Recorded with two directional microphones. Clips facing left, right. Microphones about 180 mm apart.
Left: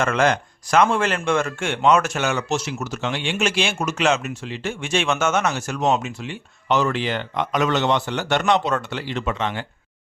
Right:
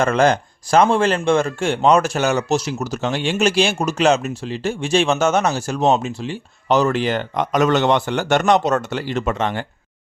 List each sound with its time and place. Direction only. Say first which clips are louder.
0.0 s speech: right 4 dB; 35° right (ahead or behind)